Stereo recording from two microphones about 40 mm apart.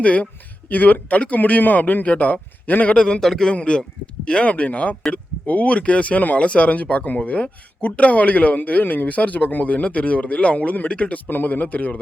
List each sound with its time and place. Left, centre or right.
0.0 s speech: left
0.7 s a man's voice: left
2.9 s a man's voice: left
3.2 s a man's voice: centre
3.5 s a man's voice: left
11.3 s speech: left